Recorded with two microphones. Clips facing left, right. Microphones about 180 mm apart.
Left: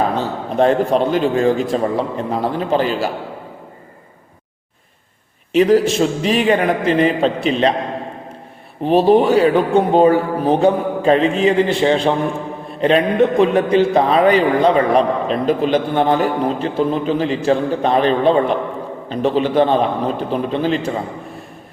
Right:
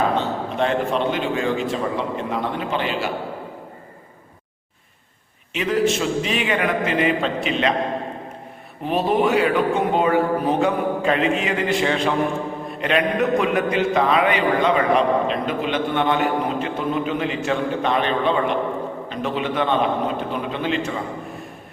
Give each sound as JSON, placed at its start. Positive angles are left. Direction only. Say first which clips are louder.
{"t": 0.2, "sound": "a man's voice", "louder": "left 5 dB", "side_deg": 40}
{"t": 5.5, "sound": "a man's voice", "louder": "left 8 dB", "side_deg": 35}
{"t": 8.8, "sound": "a man's voice", "louder": "left 7 dB", "side_deg": 30}